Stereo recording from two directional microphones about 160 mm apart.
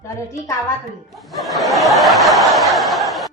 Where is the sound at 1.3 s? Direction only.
Centre (ahead or behind).